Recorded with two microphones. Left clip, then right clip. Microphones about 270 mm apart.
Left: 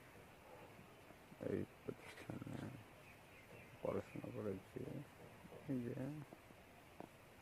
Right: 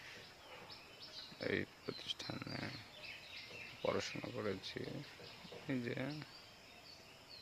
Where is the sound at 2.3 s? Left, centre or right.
Right.